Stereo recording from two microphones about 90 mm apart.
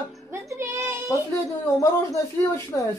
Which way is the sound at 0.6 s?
30° right (ahead or behind).